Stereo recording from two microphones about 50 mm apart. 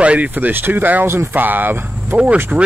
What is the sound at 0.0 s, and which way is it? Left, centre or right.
Speech, right.